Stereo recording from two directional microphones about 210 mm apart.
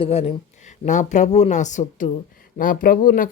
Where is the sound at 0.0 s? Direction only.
30° left (ahead or behind).